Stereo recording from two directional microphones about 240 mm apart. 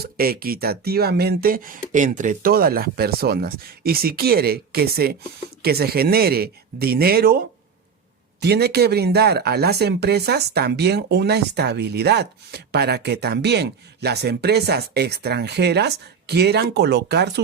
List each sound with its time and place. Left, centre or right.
0.0 s speech: right